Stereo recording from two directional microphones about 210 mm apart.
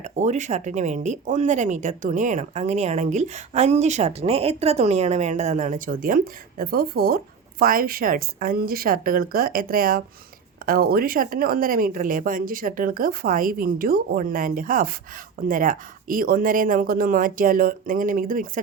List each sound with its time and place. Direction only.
0.0 s speech: 35° right (ahead or behind)